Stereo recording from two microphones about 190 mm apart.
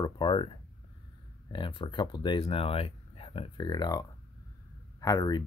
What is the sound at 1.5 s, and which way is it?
Speech, 25° left (ahead or behind).